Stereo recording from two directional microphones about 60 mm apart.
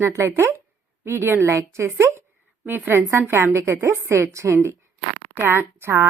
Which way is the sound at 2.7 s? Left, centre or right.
Right.